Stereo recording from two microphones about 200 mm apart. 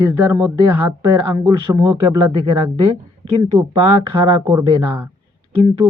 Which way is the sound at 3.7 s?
20° right (ahead or behind).